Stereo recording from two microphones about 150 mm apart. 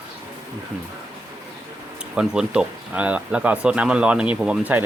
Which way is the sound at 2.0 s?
5° right (ahead or behind).